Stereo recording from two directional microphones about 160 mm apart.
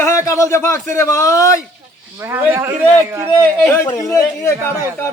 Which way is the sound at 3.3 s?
15° left (ahead or behind).